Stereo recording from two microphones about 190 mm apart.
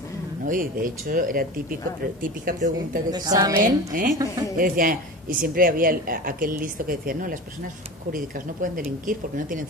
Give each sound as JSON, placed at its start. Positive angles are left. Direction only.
{"t": 0.5, "sound": "speech", "side_deg": -45}
{"t": 3.1, "sound": "a woman's voice", "side_deg": -20}
{"t": 3.6, "sound": "speech", "side_deg": -45}